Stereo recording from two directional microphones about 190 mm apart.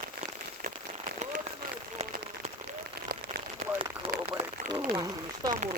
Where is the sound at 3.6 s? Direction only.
55° right (ahead or behind).